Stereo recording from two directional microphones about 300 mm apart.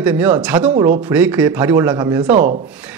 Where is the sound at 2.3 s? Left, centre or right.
Right.